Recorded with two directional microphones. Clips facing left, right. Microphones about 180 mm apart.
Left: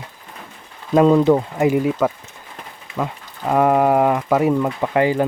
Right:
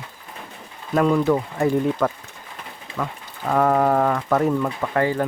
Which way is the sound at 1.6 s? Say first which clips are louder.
Left 3 dB; 10° left (ahead or behind).